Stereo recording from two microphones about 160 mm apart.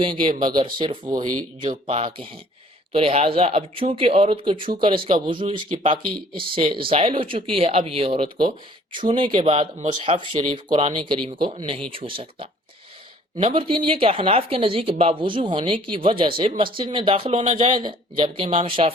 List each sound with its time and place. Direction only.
0.0 s speech: 30° right (ahead or behind)